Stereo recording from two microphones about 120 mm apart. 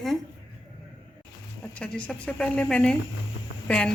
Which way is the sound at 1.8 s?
10° left (ahead or behind).